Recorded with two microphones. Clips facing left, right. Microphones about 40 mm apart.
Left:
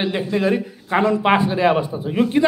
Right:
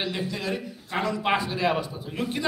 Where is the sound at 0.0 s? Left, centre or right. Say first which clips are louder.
Left 10 dB; left.